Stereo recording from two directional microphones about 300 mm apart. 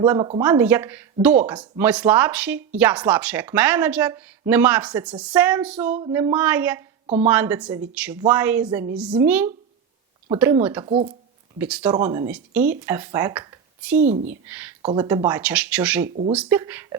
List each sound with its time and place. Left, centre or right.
0.0 s speech: centre
10.8 s speech: centre
11.5 s speech: centre
16.0 s speech: right
16.3 s speech: centre